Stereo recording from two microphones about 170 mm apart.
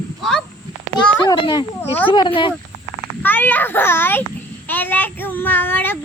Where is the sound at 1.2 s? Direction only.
30° left (ahead or behind).